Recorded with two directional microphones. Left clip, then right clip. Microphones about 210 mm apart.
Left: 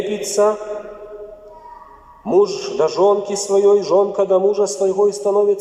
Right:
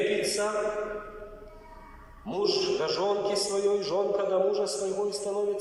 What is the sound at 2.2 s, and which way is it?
A man's voice, 50° left (ahead or behind).